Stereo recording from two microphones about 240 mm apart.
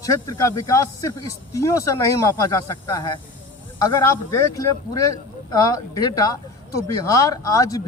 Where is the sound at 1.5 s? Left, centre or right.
Centre.